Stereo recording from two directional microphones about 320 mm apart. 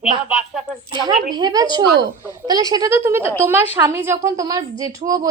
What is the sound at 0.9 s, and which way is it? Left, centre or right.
A woman's voice, centre.